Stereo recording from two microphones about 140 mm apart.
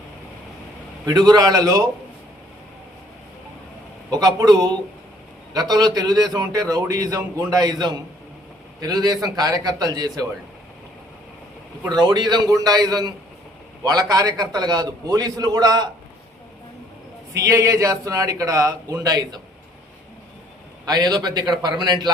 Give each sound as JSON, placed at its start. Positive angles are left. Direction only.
{"t": 1.3, "sound": "a man's voice", "side_deg": -25}
{"t": 4.1, "sound": "a man's voice", "side_deg": -25}
{"t": 11.9, "sound": "a man's voice", "side_deg": -30}
{"t": 17.3, "sound": "a man's voice", "side_deg": -20}
{"t": 20.8, "sound": "a man's voice", "side_deg": -30}